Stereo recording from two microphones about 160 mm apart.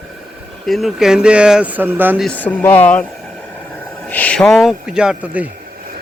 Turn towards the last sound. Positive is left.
turn(degrees=-5)  # may be behind; listen again after turning